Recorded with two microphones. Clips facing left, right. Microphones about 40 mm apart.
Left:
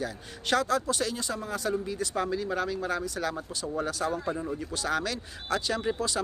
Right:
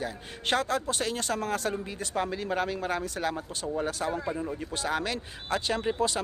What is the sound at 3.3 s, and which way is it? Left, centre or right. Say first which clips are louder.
Speech: right 1 dB; centre.